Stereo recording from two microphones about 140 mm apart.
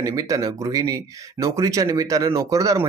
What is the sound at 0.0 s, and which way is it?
Speech, 25° right (ahead or behind).